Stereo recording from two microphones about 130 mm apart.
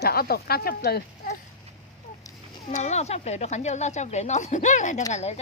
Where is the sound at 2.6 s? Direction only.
60° left (ahead or behind).